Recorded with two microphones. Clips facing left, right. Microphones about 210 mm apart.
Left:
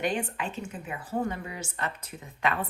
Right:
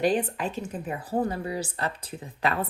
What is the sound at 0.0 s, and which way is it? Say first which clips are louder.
Speech: right 5 dB; 35° right (ahead or behind).